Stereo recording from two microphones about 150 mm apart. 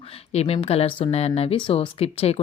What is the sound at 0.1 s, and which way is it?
A woman's voice, 45° left (ahead or behind).